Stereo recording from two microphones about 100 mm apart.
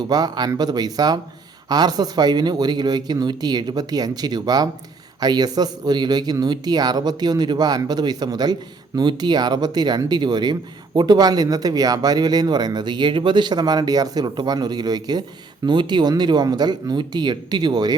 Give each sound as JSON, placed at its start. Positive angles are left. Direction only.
{"t": 0.1, "sound": "speech", "side_deg": -40}